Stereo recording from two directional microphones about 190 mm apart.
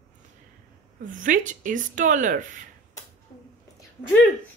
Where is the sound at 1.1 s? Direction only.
45° right (ahead or behind).